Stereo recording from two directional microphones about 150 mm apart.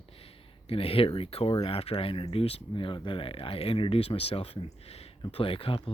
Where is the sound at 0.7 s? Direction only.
40° left (ahead or behind).